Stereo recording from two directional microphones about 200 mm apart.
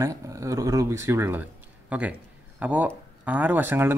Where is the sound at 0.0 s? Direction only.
15° right (ahead or behind).